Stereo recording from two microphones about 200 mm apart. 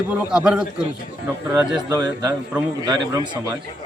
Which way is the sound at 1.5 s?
20° right (ahead or behind).